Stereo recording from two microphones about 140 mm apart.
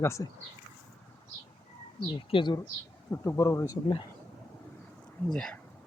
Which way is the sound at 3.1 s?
15° left (ahead or behind).